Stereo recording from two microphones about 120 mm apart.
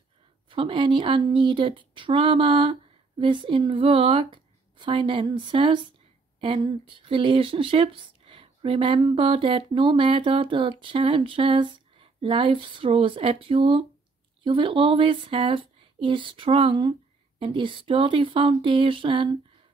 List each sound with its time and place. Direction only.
0.5 s speech: 45° right (ahead or behind)